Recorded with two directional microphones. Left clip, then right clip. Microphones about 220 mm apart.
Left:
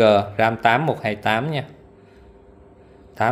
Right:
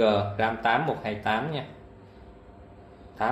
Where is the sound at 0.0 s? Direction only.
45° left (ahead or behind).